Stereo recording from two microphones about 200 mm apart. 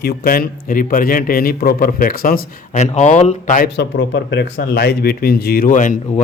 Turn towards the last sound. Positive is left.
turn(degrees=40)  # may be behind; listen again after turning